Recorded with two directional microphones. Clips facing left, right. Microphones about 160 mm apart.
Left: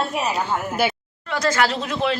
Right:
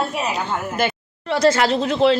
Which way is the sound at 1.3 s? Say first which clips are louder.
Right 5 dB; 30° right (ahead or behind).